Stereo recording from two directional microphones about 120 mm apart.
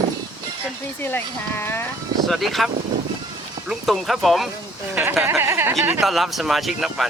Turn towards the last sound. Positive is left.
turn(degrees=0)  # may be behind; listen again after turning